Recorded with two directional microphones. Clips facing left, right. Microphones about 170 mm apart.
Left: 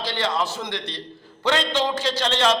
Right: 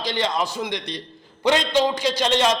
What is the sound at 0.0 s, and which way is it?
A man's voice, 15° right (ahead or behind).